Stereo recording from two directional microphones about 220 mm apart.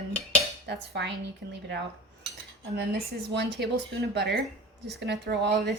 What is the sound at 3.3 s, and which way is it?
A woman's voice, 50° right (ahead or behind).